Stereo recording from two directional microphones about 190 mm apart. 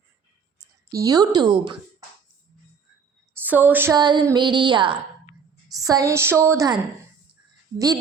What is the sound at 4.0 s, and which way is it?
A woman's voice, 20° right (ahead or behind).